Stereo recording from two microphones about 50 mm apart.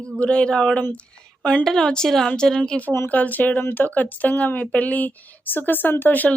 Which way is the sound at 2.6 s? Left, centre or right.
Left.